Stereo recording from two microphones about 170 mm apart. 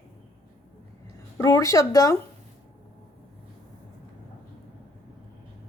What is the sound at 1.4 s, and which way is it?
Speech, 20° left (ahead or behind).